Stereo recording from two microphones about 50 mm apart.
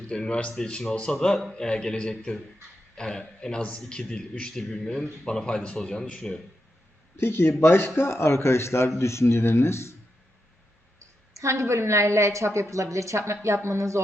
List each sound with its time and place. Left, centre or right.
0.1 s a man's voice: centre
7.2 s speech: left
11.3 s a woman's voice: right
13.4 s a woman's voice: right